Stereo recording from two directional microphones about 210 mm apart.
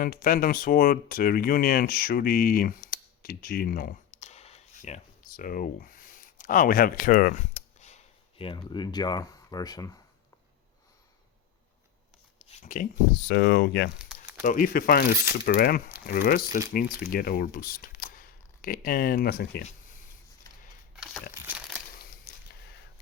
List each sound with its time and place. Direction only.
0.0 s speech: 45° left (ahead or behind); by 10.0 s 15° left (ahead or behind)
12.5 s speech: 40° left (ahead or behind)
13.2 s speech: 55° left (ahead or behind)
14.4 s speech: 40° left (ahead or behind)
20.9 s a sound: 5° right (ahead or behind)
22.3 s a sound: 45° left (ahead or behind)